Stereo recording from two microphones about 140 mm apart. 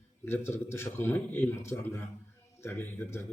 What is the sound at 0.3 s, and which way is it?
A man's voice, 15° left (ahead or behind).